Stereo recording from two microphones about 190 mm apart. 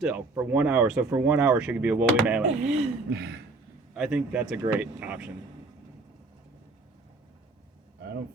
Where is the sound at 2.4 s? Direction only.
35° right (ahead or behind).